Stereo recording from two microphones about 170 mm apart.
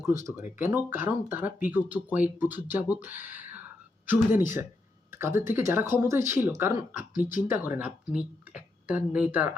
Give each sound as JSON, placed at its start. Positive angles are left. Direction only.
{"t": 0.0, "sound": "speech", "side_deg": -15}